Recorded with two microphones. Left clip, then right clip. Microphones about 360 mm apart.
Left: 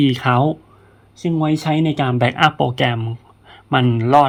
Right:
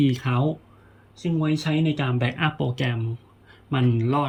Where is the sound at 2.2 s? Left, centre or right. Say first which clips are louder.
Left 11 dB; centre.